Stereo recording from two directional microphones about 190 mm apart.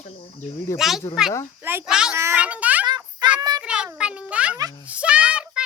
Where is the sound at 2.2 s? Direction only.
10° right (ahead or behind).